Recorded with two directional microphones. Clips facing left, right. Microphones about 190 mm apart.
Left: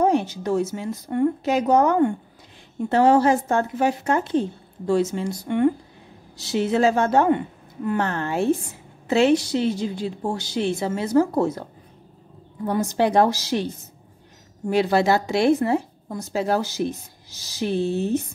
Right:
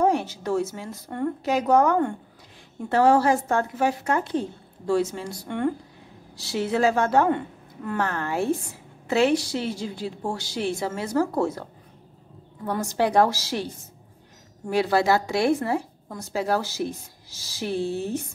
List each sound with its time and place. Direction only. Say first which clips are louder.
0.0 s speech: left 2 dB; 20° left (ahead or behind)
12.6 s speech: left 3 dB; 20° left (ahead or behind)
14.7 s speech: left 2 dB; 20° left (ahead or behind)